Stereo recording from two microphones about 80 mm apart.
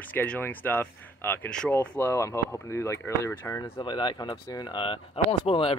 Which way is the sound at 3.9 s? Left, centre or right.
Left.